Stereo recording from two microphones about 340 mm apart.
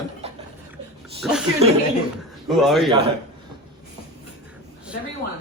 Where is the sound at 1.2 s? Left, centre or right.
Centre.